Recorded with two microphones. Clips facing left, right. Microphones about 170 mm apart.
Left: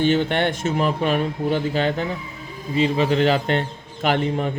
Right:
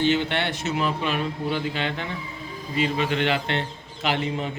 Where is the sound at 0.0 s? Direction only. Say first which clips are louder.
Left 4 dB; 50° left (ahead or behind).